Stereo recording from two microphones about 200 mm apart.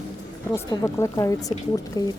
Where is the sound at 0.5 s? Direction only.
15° left (ahead or behind).